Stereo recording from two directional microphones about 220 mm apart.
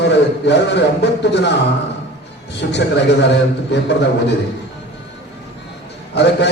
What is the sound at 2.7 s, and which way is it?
A man's voice, 50° left (ahead or behind).